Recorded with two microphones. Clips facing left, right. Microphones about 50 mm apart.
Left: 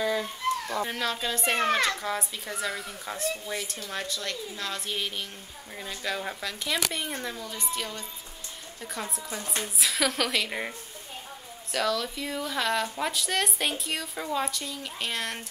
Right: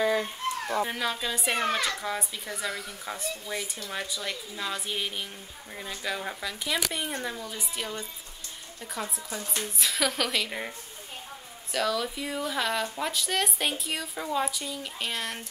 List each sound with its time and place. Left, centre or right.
0.0 s a sound: centre
0.8 s speech: centre
8.8 s speech: centre
11.7 s speech: centre